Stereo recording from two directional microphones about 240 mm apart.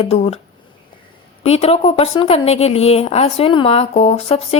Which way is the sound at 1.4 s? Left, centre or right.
Left.